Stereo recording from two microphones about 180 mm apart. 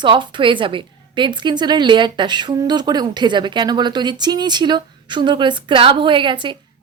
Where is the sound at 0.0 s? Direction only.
25° right (ahead or behind).